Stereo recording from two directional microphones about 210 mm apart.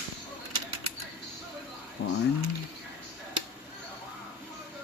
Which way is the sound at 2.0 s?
55° left (ahead or behind).